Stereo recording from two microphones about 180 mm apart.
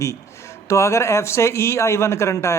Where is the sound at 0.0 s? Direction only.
15° left (ahead or behind).